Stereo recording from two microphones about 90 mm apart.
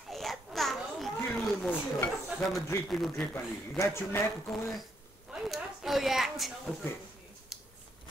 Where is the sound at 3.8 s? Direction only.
30° left (ahead or behind).